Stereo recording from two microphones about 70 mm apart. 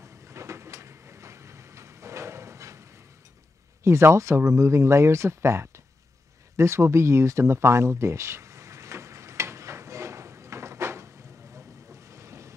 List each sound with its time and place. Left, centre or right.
0.0 s vehicle: right
3.8 s speech: right
6.5 s a sound: right
11.5 s boat: right